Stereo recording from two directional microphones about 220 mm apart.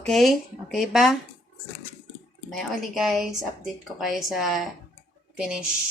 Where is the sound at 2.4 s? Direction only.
Centre (ahead or behind).